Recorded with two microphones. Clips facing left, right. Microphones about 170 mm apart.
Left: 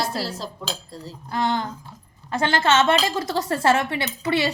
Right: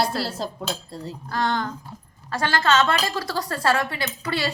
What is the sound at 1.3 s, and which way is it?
A woman's voice, 20° left (ahead or behind).